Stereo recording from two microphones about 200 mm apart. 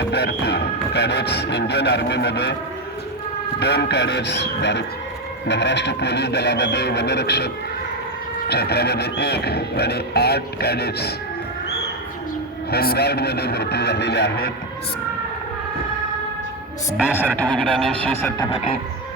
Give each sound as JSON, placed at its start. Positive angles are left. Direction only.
{"t": 0.1, "sound": "speech", "side_deg": 55}
{"t": 3.6, "sound": "speech", "side_deg": 55}
{"t": 12.7, "sound": "speech", "side_deg": 50}
{"t": 17.2, "sound": "speech", "side_deg": 5}
{"t": 18.5, "sound": "music", "side_deg": 30}